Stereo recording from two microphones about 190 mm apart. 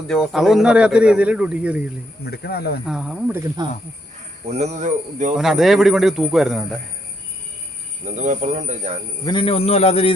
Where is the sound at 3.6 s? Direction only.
20° right (ahead or behind).